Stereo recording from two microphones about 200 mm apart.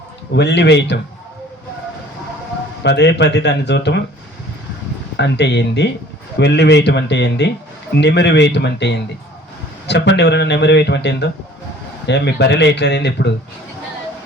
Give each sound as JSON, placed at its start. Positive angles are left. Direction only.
{"t": 0.3, "sound": "speech", "side_deg": 60}
{"t": 2.8, "sound": "speech", "side_deg": 60}
{"t": 5.1, "sound": "speech", "side_deg": 60}